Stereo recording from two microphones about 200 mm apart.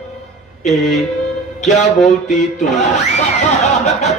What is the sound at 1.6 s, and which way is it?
A man's voice, 35° left (ahead or behind).